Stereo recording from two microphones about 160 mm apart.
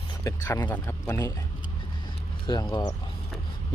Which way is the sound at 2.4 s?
30° left (ahead or behind).